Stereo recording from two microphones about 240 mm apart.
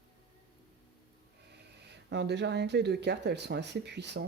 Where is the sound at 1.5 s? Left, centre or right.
Right.